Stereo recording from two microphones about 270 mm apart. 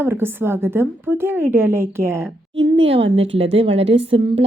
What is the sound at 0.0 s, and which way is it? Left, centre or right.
A woman's voice, centre.